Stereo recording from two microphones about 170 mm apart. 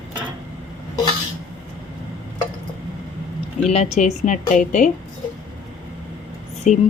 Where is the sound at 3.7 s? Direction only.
40° left (ahead or behind).